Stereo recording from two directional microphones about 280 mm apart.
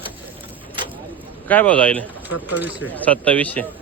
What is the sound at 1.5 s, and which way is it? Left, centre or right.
Speech, centre.